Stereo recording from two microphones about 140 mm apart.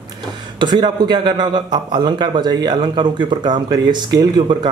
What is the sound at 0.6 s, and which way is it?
A man's voice, 30° right (ahead or behind).